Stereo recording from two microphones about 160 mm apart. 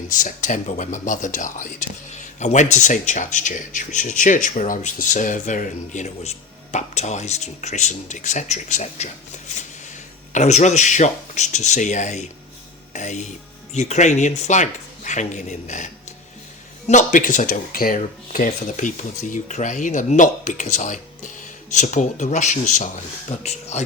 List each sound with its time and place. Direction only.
0.1 s speech: 55° left (ahead or behind)
10.3 s speech: 45° left (ahead or behind)